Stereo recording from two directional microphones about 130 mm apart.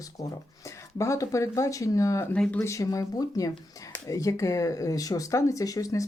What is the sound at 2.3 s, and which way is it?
Speech, 10° left (ahead or behind).